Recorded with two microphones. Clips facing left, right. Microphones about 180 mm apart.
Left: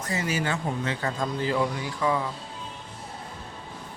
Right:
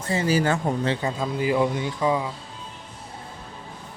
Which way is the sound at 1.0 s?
10° right (ahead or behind).